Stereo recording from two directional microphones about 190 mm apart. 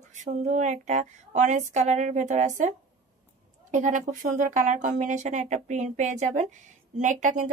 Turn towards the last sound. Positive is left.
turn(degrees=-40)  # may be behind; listen again after turning